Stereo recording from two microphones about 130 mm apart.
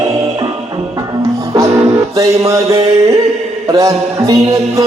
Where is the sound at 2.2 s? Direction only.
25° right (ahead or behind).